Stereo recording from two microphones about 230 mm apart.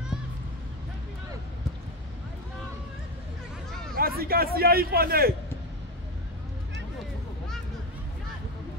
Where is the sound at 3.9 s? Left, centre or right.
Right.